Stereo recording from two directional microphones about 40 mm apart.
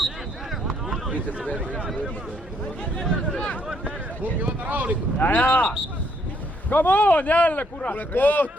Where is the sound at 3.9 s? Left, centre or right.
Right.